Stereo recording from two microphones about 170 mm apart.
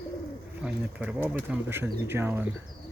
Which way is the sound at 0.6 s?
5° right (ahead or behind).